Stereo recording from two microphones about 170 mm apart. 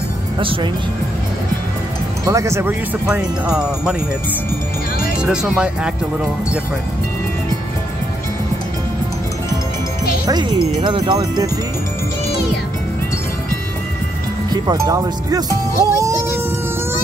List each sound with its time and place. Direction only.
0.4 s speech: 30° right (ahead or behind)
2.2 s speech: 20° right (ahead or behind)
5.2 s speech: 5° right (ahead or behind)
10.2 s speech: 25° right (ahead or behind)
14.5 s speech: 20° right (ahead or behind)